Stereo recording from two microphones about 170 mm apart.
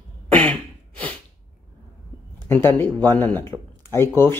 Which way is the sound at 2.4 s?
15° left (ahead or behind).